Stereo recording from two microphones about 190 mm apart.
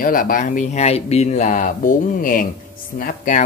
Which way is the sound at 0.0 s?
45° left (ahead or behind).